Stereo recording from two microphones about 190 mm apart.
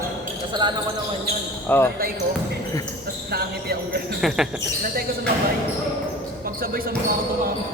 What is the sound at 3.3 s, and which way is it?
Speech, 55° right (ahead or behind).